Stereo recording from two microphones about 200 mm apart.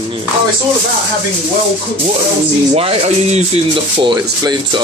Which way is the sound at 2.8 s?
30° right (ahead or behind).